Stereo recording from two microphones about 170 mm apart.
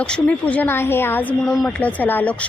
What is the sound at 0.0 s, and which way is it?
Speech, 5° left (ahead or behind).